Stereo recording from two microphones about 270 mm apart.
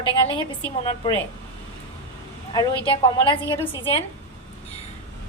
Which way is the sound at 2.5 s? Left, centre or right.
Centre.